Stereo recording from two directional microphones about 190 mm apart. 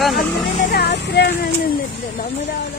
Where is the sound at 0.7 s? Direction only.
60° left (ahead or behind).